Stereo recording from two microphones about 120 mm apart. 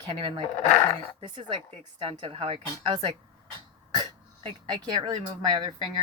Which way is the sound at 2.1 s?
50° right (ahead or behind).